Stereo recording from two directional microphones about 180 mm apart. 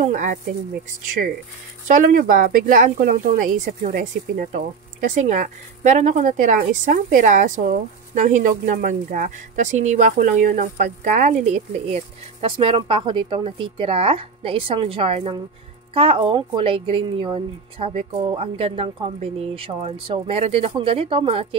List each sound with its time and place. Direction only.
0.0 s speech: 45° right (ahead or behind)
1.9 s speech: 50° right (ahead or behind); by 21.5 s 30° right (ahead or behind)